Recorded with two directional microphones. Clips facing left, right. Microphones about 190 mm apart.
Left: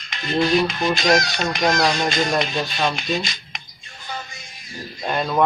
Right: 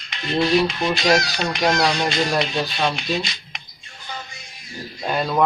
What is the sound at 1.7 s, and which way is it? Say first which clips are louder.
Music: even; 45° left (ahead or behind).